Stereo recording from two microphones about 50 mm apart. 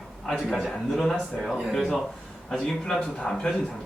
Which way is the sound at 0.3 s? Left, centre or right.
Centre.